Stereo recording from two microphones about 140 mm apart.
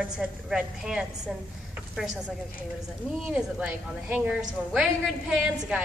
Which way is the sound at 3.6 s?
5° right (ahead or behind).